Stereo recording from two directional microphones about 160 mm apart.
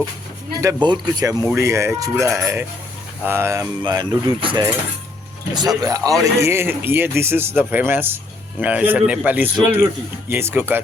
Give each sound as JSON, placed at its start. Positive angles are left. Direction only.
{"t": 0.6, "sound": "a man's voice", "side_deg": -25}
{"t": 4.4, "sound": "cutlery", "side_deg": -30}
{"t": 5.5, "sound": "a man's voice", "side_deg": -20}